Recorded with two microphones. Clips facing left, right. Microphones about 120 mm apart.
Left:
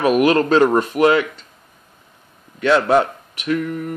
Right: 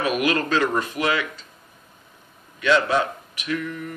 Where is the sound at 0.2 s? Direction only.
35° left (ahead or behind).